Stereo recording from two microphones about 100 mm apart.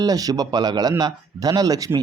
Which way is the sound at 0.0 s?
40° right (ahead or behind).